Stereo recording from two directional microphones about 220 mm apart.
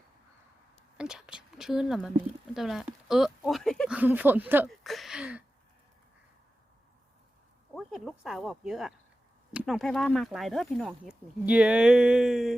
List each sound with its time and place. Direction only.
0.9 s a woman's voice: 5° right (ahead or behind)
7.7 s speech: centre (ahead or behind)